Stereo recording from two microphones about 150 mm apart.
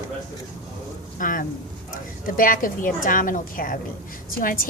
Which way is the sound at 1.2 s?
65° left (ahead or behind).